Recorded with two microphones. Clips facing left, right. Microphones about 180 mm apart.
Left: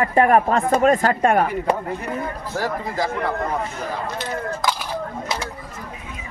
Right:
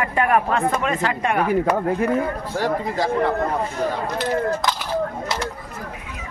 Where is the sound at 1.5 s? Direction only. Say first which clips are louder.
Right 4 dB; 55° right (ahead or behind).